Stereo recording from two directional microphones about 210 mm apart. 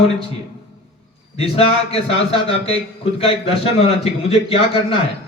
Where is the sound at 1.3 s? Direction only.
25° left (ahead or behind).